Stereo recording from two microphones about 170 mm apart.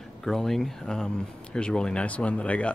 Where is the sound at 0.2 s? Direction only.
Centre (ahead or behind).